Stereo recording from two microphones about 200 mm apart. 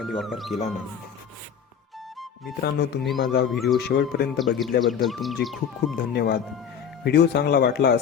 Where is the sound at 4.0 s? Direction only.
50° left (ahead or behind).